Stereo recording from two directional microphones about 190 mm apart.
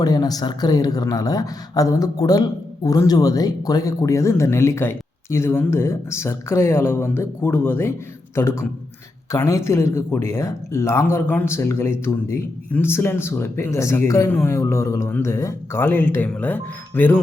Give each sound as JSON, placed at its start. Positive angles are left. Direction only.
{"t": 0.0, "sound": "speech", "side_deg": 20}